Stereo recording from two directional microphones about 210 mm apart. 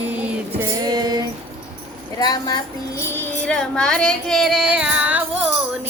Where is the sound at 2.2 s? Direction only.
20° left (ahead or behind).